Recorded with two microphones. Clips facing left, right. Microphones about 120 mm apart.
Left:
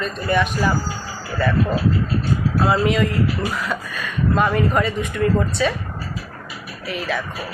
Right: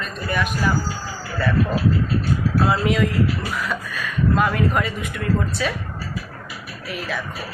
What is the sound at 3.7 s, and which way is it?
A woman's voice, centre (ahead or behind).